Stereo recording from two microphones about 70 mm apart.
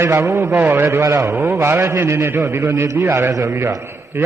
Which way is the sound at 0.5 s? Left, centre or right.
Right.